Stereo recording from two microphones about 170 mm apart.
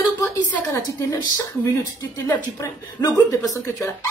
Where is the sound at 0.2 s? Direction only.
20° left (ahead or behind).